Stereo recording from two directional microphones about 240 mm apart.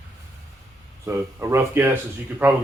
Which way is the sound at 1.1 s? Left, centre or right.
Centre.